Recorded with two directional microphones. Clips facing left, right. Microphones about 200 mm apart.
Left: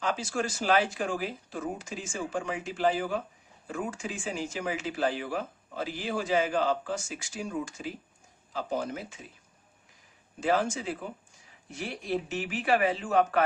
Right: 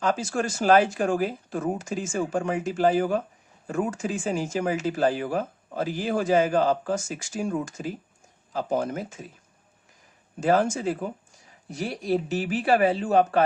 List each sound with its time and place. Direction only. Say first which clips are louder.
0.0 s speech: right 5 dB; 45° right (ahead or behind)
10.4 s speech: right 5 dB; 45° right (ahead or behind)